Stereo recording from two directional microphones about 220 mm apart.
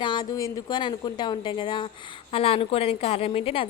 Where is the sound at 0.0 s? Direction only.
20° left (ahead or behind).